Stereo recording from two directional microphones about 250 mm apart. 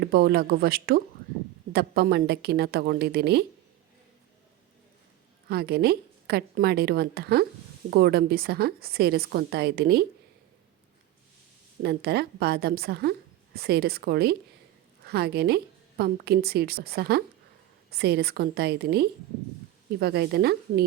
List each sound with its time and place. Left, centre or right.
0.0 s a woman's voice: right
5.5 s a woman's voice: right
11.8 s a woman's voice: right